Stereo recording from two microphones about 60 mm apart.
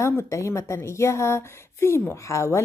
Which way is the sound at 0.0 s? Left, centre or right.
Left.